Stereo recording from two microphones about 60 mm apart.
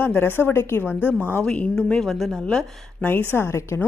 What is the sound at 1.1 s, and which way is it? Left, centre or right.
Speech, left.